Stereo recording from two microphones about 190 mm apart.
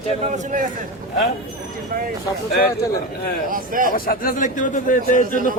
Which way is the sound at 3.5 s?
45° right (ahead or behind).